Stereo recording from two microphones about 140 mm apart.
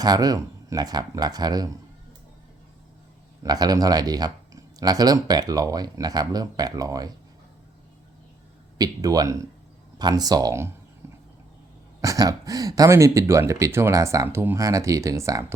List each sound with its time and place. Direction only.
0.0 s speech: 30° right (ahead or behind)
3.4 s speech: 30° right (ahead or behind)
8.8 s speech: 25° right (ahead or behind)
11.0 s horse: 20° right (ahead or behind)
11.9 s speech: 25° right (ahead or behind)